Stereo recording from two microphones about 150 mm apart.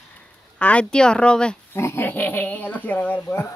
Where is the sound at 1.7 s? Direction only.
15° left (ahead or behind).